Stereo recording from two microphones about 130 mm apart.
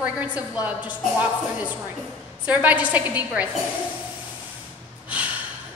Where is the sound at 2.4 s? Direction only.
10° right (ahead or behind).